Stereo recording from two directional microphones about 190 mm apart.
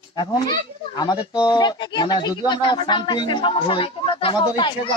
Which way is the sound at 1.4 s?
20° left (ahead or behind).